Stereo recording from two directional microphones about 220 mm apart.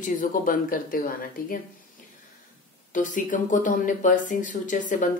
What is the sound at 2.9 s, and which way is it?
A woman's voice, 35° left (ahead or behind).